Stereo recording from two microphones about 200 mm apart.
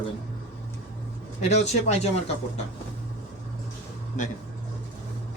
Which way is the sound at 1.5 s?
35° left (ahead or behind).